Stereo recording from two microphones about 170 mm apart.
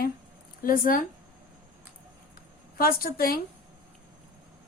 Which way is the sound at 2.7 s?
60° left (ahead or behind).